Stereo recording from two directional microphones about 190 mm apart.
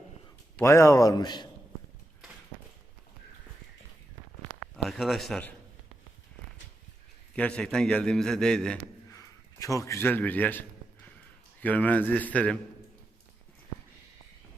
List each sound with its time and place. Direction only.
0.6 s a man's voice: 15° left (ahead or behind)
4.8 s a man's voice: centre (ahead or behind)
7.3 s a man's voice: 5° left (ahead or behind)
9.1 s a sound: 15° left (ahead or behind)
11.6 s speech: 10° left (ahead or behind)